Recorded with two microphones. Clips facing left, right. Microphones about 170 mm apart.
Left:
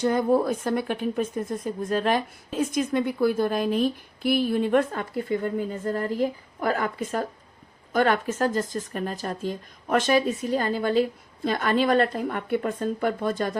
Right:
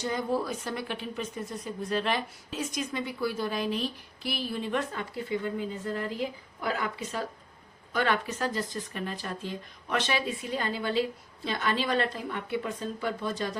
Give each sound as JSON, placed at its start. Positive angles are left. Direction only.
{"t": 0.0, "sound": "speech", "side_deg": 55}